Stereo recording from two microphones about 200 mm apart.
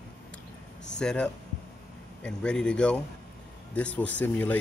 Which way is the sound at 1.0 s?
5° left (ahead or behind).